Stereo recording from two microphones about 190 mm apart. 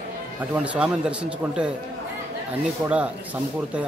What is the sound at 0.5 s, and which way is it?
Speech, 5° right (ahead or behind).